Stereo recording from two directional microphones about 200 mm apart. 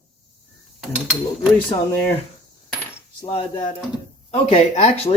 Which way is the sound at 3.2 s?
25° left (ahead or behind).